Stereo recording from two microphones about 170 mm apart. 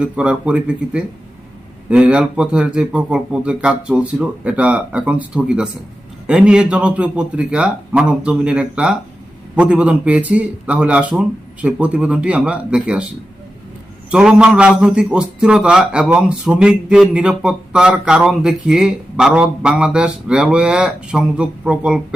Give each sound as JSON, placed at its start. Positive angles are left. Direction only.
{"t": 0.0, "sound": "speech", "side_deg": -5}
{"t": 14.1, "sound": "a man's voice", "side_deg": -5}